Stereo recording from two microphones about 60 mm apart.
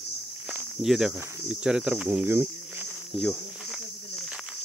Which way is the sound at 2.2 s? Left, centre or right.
Right.